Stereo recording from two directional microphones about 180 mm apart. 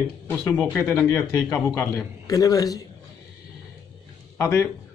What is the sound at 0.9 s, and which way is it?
A man's voice, 10° left (ahead or behind).